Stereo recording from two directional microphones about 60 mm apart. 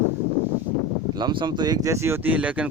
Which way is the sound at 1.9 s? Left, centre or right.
Right.